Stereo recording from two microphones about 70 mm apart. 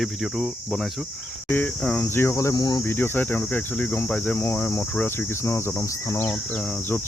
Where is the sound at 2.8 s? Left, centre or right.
Left.